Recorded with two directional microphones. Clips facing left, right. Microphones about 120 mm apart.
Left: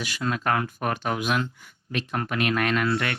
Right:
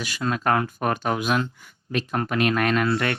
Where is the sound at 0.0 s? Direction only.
35° right (ahead or behind).